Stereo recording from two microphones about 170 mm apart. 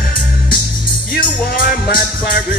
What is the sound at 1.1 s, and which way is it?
Music, 60° left (ahead or behind).